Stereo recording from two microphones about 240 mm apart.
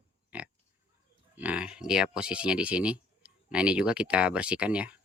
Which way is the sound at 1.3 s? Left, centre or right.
Centre.